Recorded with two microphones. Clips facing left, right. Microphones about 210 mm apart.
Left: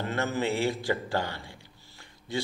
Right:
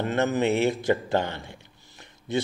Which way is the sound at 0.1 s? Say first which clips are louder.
Right 6 dB; 20° right (ahead or behind).